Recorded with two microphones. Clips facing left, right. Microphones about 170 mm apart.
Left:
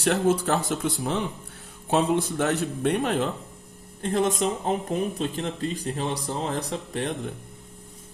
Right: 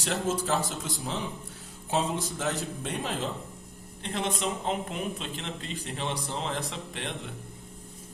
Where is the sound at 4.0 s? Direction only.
45° left (ahead or behind).